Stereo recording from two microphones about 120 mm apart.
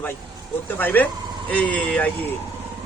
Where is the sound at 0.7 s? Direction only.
15° left (ahead or behind).